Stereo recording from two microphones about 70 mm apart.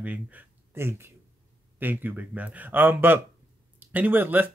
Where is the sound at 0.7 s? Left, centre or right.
Right.